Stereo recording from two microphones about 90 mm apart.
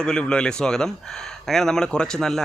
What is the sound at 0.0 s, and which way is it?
Speech, 10° left (ahead or behind).